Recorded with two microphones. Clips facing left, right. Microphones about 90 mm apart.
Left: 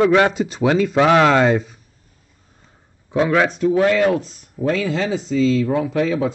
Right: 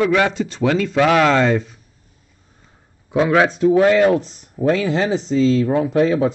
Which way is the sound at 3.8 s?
25° right (ahead or behind).